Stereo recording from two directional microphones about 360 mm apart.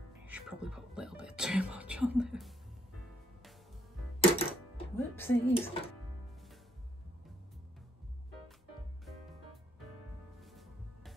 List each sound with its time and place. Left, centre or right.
0.3 s a sound: centre
4.2 s music: centre
10.4 s music: centre